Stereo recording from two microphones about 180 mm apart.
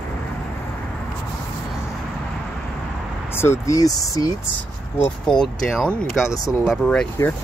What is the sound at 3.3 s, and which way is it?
Speech, 15° left (ahead or behind).